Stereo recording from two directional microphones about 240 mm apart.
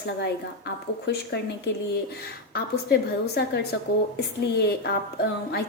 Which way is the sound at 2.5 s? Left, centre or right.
Left.